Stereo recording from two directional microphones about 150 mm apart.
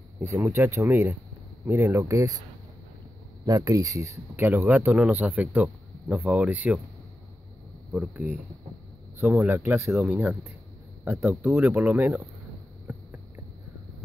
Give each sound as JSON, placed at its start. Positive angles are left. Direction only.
{"t": 0.2, "sound": "speech", "side_deg": -20}
{"t": 3.4, "sound": "speech", "side_deg": -25}
{"t": 7.9, "sound": "speech", "side_deg": -10}
{"t": 9.8, "sound": "speech", "side_deg": -5}
{"t": 11.1, "sound": "speech", "side_deg": -15}
{"t": 12.9, "sound": "a sound", "side_deg": -10}